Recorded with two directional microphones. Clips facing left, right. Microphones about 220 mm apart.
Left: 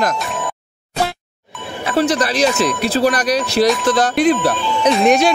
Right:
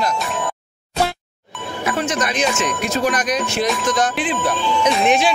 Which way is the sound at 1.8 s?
35° left (ahead or behind).